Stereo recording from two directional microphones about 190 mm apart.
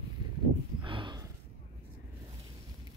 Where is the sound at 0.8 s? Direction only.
25° right (ahead or behind).